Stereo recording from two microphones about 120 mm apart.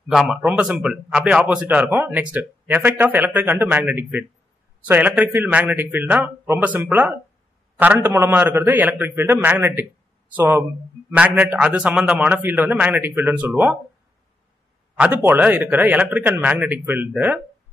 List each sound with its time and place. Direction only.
0.1 s a man's voice: 5° right (ahead or behind)
15.0 s a man's voice: 15° right (ahead or behind)